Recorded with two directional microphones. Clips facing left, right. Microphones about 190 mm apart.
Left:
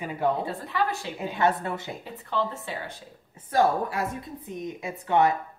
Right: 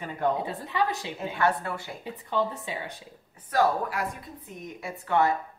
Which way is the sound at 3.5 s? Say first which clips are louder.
Left 2 dB; 25° left (ahead or behind).